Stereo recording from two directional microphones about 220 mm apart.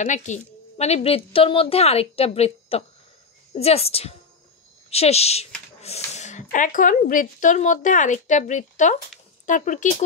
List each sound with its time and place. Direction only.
0.0 s a woman's voice: 35° left (ahead or behind)